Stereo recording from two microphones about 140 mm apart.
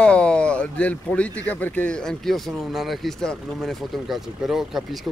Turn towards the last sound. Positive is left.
turn(degrees=-5)  # may be behind; listen again after turning